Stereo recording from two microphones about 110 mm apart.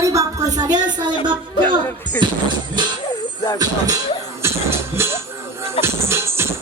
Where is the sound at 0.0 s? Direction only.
30° right (ahead or behind).